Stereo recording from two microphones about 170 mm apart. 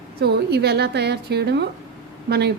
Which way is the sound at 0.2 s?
70° right (ahead or behind).